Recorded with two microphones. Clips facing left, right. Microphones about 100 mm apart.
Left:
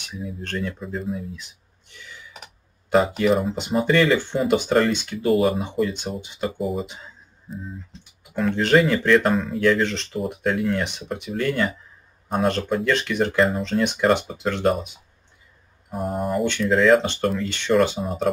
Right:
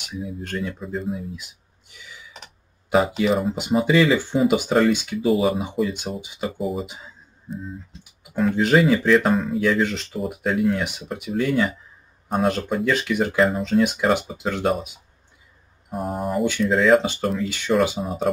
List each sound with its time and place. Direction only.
0.1 s speech: 5° right (ahead or behind)
2.3 s speech: centre (ahead or behind)
15.9 s speech: centre (ahead or behind)